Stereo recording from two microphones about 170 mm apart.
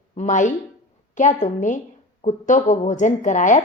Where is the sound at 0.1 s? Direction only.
45° left (ahead or behind).